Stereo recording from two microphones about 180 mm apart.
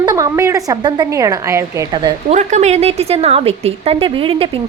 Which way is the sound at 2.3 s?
40° right (ahead or behind).